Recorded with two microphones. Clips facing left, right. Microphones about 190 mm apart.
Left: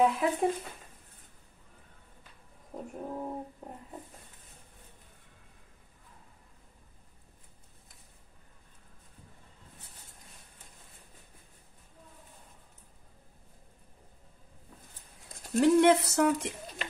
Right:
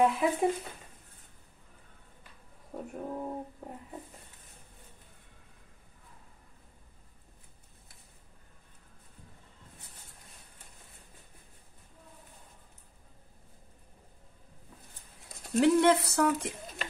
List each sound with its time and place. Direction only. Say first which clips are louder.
0.0 s speech: even; centre (ahead or behind)
2.7 s speech: right 1 dB; centre (ahead or behind)
15.1 s a sound: even; centre (ahead or behind)
15.8 s speech: left 2 dB; 20° left (ahead or behind)